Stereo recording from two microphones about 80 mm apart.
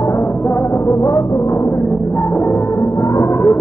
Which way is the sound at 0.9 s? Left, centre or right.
Left.